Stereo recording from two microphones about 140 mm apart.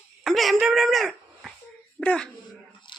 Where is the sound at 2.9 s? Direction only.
35° left (ahead or behind).